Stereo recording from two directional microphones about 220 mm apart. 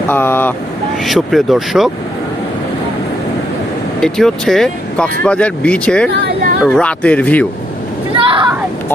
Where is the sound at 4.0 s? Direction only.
Centre (ahead or behind).